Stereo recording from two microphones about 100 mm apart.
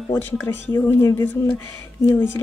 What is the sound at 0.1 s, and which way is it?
Speech, 20° left (ahead or behind).